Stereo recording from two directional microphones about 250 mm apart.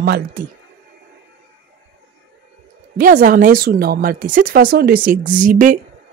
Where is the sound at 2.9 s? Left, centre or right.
Right.